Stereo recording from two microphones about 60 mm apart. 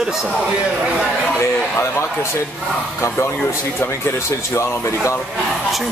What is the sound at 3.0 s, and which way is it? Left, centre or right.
Speech, left.